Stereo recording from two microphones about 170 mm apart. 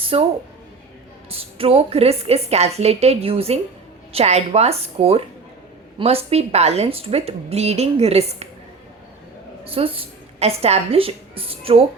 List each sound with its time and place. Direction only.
0.0 s speech: 35° right (ahead or behind)
1.3 s a woman's voice: 35° right (ahead or behind)
9.6 s a woman's voice: 35° right (ahead or behind)